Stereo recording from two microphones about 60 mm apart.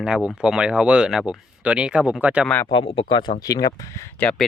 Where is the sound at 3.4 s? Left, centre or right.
Left.